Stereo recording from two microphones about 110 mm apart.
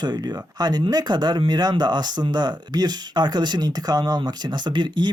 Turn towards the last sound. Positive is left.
turn(degrees=-45)  # may be behind; listen again after turning